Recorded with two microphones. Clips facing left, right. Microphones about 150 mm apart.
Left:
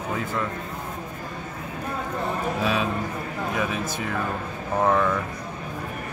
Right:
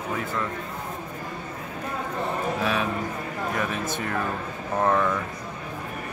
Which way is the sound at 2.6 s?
15° left (ahead or behind).